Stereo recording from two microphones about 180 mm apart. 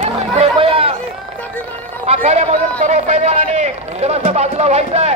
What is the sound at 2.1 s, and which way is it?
A man's voice, 35° right (ahead or behind).